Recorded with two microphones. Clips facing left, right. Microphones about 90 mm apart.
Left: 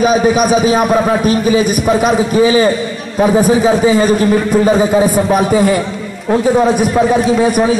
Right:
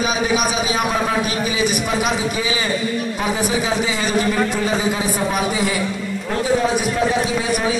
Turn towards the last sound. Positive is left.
turn(degrees=45)  # may be behind; listen again after turning